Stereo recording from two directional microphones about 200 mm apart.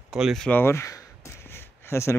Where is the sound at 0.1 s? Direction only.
Centre (ahead or behind).